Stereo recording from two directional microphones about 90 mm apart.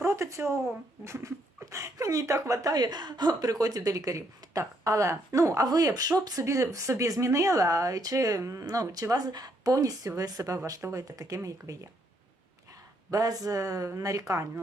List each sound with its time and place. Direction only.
0.0 s speech: 30° right (ahead or behind)
13.1 s speech: 40° right (ahead or behind)